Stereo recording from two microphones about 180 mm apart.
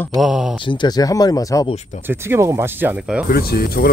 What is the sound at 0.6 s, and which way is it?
Speech, 25° left (ahead or behind).